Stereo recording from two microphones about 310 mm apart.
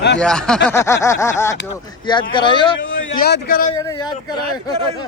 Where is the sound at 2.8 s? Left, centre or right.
Left.